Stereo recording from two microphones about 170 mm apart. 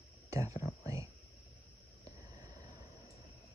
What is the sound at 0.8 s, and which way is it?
Speech, 15° right (ahead or behind).